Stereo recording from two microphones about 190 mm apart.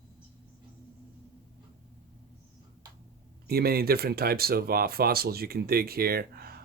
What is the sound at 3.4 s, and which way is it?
Speech, 55° right (ahead or behind).